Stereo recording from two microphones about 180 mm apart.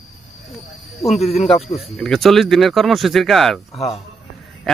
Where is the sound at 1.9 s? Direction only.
Centre (ahead or behind).